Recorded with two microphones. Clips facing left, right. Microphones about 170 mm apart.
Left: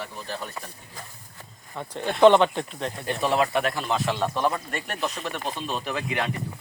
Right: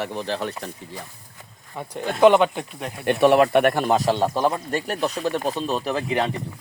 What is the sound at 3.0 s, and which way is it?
Speech, 65° right (ahead or behind).